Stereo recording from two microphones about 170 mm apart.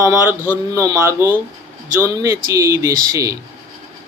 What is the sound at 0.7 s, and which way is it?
Speech, 20° right (ahead or behind).